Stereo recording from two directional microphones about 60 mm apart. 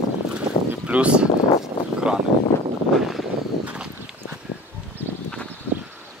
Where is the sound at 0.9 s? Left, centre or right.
Centre.